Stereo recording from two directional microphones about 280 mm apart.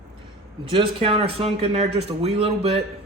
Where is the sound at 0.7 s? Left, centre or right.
Centre.